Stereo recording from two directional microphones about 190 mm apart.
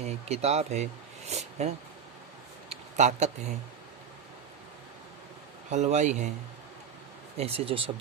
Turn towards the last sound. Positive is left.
turn(degrees=-30)  # may be behind; listen again after turning